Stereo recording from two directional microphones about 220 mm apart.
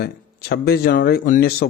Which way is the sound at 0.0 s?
45° left (ahead or behind).